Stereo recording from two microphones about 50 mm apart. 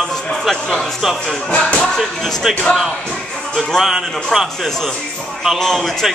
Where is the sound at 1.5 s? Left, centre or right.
Left.